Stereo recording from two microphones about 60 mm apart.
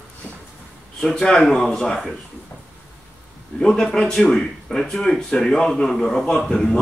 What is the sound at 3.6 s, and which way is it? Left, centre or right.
A man's voice, centre.